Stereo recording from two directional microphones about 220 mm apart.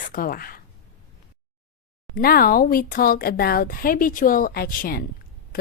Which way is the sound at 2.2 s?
40° left (ahead or behind).